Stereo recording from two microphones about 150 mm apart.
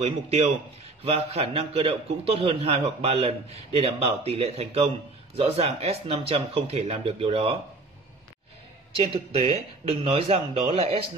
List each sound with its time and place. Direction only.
0.0 s a man's voice: 45° right (ahead or behind)
8.9 s a man's voice: 40° right (ahead or behind)